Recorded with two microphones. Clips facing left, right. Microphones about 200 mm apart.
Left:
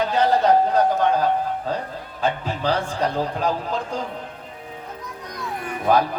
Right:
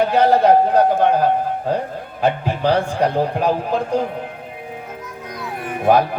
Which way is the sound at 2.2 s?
55° right (ahead or behind).